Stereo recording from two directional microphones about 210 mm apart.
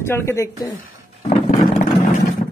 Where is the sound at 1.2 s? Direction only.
35° left (ahead or behind).